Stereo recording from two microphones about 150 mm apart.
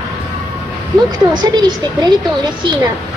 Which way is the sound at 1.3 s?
30° right (ahead or behind).